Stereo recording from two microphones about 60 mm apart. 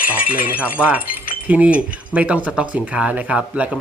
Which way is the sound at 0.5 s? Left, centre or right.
Right.